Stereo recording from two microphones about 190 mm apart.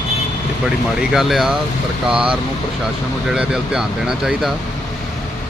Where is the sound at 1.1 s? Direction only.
Centre (ahead or behind).